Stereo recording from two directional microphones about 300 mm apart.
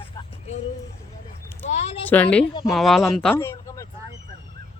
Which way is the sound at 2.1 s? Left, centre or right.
Centre.